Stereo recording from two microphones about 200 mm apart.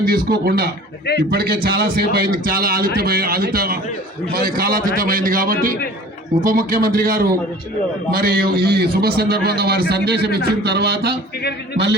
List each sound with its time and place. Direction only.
0.0 s a man's voice: 50° right (ahead or behind)